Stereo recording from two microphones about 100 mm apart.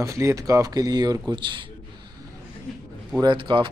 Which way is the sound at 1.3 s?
50° right (ahead or behind).